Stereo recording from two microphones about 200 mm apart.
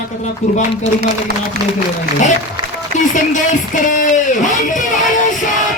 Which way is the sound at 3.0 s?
40° left (ahead or behind).